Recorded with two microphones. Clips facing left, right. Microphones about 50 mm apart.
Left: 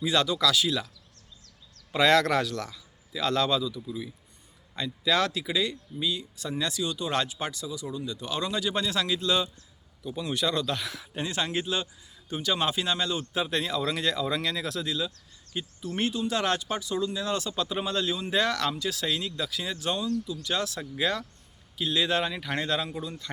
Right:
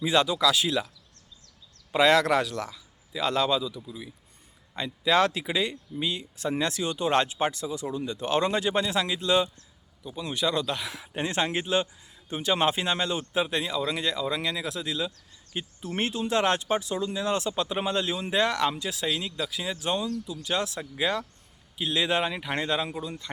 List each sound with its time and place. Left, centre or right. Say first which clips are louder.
0.0 s speech: right 2 dB; right
1.9 s speech: right 1 dB; centre
4.7 s speech: right 3 dB; right
8.8 s speech: right 1 dB; right
10.0 s speech: even; centre
10.9 s speech: right 3 dB; right
15.5 s speech: right 1 dB; right
19.0 s speech: right 3 dB; centre